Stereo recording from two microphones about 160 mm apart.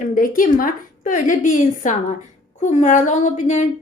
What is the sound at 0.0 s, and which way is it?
Speech, 55° left (ahead or behind).